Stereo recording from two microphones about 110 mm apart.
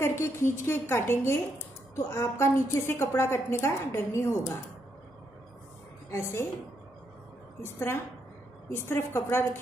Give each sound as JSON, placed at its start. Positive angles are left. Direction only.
{"t": 0.0, "sound": "a woman's voice", "side_deg": 25}
{"t": 6.0, "sound": "a woman's voice", "side_deg": 25}
{"t": 7.6, "sound": "a woman's voice", "side_deg": 20}